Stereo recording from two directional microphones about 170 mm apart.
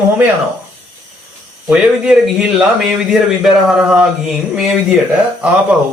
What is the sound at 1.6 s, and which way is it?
Speech, 5° right (ahead or behind).